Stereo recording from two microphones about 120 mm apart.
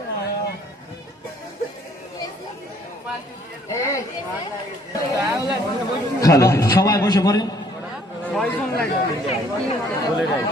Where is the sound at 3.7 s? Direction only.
25° left (ahead or behind).